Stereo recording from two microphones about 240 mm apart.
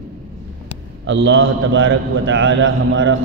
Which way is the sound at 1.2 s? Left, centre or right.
Right.